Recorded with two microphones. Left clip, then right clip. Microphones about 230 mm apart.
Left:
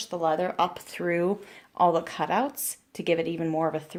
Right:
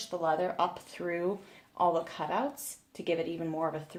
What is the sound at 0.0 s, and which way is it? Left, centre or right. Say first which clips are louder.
Speech: left 4 dB; left.